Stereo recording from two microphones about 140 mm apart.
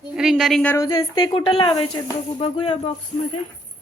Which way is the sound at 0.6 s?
25° left (ahead or behind).